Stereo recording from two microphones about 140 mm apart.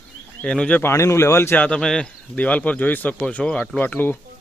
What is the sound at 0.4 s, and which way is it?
A man's voice, 5° left (ahead or behind).